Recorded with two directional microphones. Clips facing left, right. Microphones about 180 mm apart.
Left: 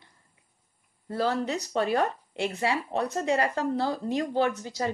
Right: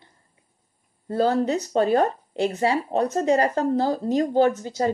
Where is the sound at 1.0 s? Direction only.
35° right (ahead or behind).